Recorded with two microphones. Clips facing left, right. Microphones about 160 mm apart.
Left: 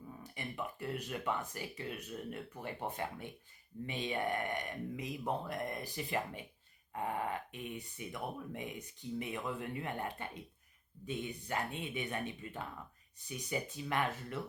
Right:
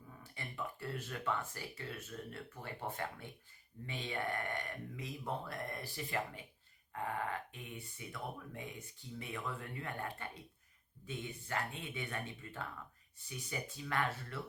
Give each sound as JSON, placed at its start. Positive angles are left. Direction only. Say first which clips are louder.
{"t": 0.2, "sound": "speech", "louder": "left 2 dB", "side_deg": 15}